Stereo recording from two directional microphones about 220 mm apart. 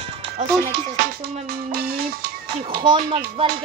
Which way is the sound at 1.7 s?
45° right (ahead or behind).